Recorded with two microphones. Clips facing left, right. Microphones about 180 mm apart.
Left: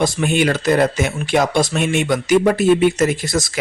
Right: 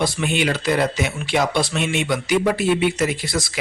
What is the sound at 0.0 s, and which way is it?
Speech, 45° left (ahead or behind).